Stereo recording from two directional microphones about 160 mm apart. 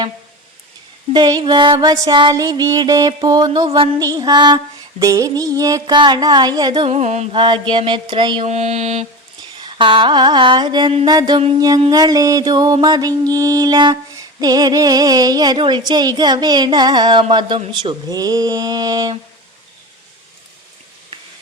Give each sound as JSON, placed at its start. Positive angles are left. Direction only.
{"t": 1.1, "sound": "music", "side_deg": -25}
{"t": 6.8, "sound": "music", "side_deg": -45}
{"t": 8.4, "sound": "music", "side_deg": -45}